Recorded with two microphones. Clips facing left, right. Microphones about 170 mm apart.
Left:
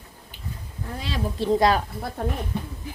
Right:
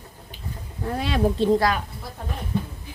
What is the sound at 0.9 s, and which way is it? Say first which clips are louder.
Speech: right 6 dB; 60° right (ahead or behind).